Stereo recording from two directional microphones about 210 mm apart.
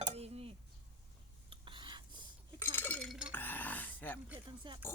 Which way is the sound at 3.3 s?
10° left (ahead or behind).